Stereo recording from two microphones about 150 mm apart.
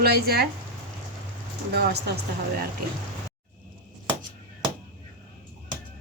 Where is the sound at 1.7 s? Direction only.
90° right.